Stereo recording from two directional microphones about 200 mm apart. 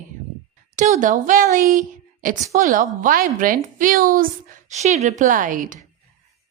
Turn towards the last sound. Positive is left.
turn(degrees=-40)  # may be behind; listen again after turning